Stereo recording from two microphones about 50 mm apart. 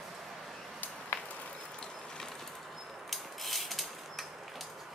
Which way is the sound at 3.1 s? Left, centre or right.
Centre.